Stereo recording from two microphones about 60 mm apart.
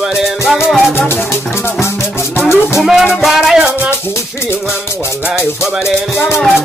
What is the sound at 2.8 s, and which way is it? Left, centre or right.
Speech, centre.